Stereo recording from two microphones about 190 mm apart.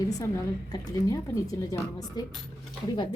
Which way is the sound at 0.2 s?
20° left (ahead or behind).